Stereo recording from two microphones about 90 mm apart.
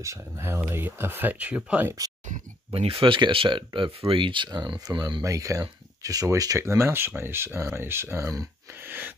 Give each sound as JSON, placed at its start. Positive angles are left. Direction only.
{"t": 0.0, "sound": "speech", "side_deg": -35}
{"t": 2.7, "sound": "speech", "side_deg": -90}
{"t": 5.2, "sound": "speech", "side_deg": -40}
{"t": 8.7, "sound": "speech", "side_deg": -20}